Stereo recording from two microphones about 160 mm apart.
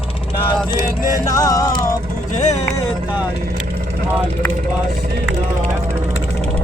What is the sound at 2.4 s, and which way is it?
Speech, 45° left (ahead or behind).